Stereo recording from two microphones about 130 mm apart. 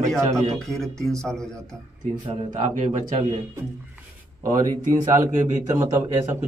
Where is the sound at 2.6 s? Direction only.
70° right (ahead or behind).